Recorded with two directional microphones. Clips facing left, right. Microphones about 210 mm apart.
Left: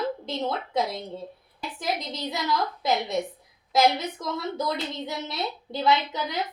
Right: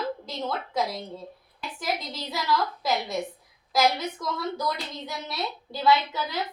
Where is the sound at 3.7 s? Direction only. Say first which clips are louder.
Left 2 dB; 25° left (ahead or behind).